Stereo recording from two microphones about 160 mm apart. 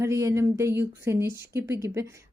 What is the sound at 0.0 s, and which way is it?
Speech, 20° right (ahead or behind).